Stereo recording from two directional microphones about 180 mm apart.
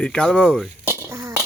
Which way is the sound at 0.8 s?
15° right (ahead or behind).